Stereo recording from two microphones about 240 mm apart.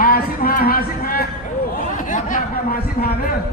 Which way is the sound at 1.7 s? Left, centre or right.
Left.